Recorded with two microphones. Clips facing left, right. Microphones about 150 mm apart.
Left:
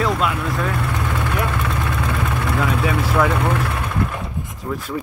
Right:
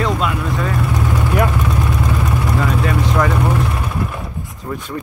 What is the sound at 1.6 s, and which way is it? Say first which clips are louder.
Vehicle: right 4 dB; 15° right (ahead or behind).